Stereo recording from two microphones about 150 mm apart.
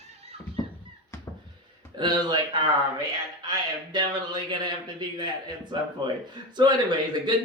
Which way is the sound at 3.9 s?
30° right (ahead or behind).